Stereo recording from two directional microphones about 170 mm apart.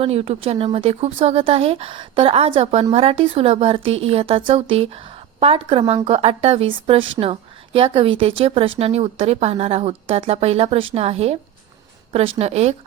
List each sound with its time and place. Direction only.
0.0 s speech: 35° right (ahead or behind)